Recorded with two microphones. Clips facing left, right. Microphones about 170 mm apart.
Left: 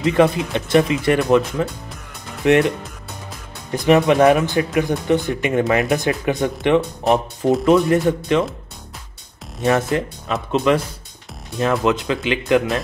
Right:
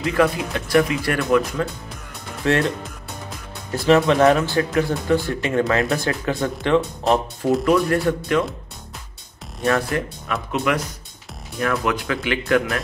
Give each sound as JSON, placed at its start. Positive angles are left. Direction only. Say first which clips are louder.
{"t": 0.0, "sound": "speech", "louder": "left 4 dB", "side_deg": 20}
{"t": 3.7, "sound": "speech", "louder": "left 2 dB", "side_deg": 15}
{"t": 9.6, "sound": "speech", "louder": "left 3 dB", "side_deg": 20}